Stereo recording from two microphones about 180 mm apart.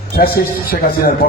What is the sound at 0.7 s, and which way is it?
Speech, 55° left (ahead or behind).